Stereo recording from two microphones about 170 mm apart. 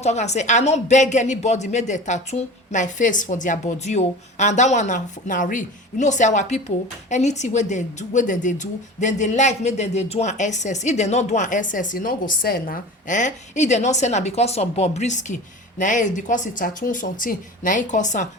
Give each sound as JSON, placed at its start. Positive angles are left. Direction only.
{"t": 0.0, "sound": "a woman's voice", "side_deg": 40}